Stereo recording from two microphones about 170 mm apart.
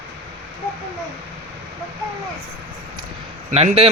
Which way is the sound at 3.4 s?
40° right (ahead or behind).